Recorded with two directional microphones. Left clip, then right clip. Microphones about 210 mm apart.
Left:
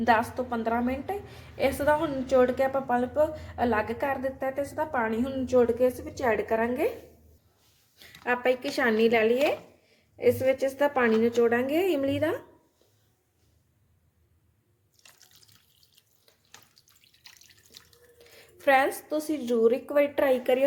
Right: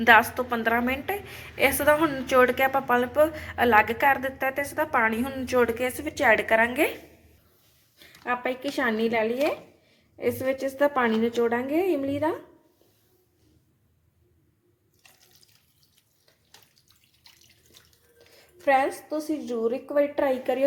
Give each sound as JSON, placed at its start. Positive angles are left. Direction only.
{"t": 0.0, "sound": "a woman's voice", "side_deg": 0}
{"t": 7.9, "sound": "a woman's voice", "side_deg": 0}
{"t": 18.3, "sound": "a sound", "side_deg": 15}
{"t": 19.0, "sound": "a woman's voice", "side_deg": 20}